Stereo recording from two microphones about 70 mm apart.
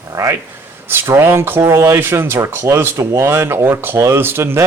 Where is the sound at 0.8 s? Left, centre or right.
Right.